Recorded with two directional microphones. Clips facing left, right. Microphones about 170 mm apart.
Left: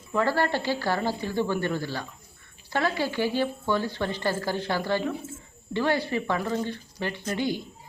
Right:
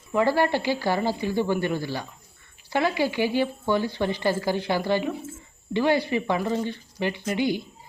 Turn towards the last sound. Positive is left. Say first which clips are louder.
# right 3 dB
turn(degrees=-15)  # may be behind; listen again after turning